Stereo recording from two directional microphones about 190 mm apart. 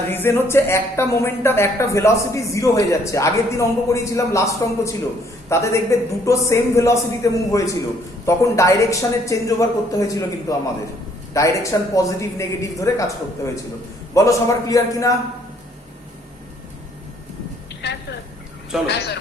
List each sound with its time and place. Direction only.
0.1 s a woman's voice: 10° left (ahead or behind)
17.8 s a sound: 60° left (ahead or behind)
18.9 s a man's voice: 60° left (ahead or behind)